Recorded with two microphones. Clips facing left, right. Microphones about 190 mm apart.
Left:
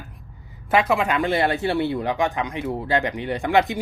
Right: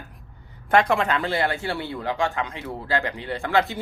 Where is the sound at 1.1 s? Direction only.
20° left (ahead or behind).